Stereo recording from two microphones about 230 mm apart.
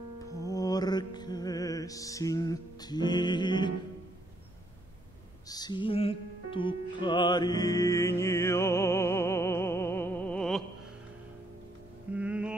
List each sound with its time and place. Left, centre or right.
0.2 s music: centre
5.5 s music: centre
12.1 s music: centre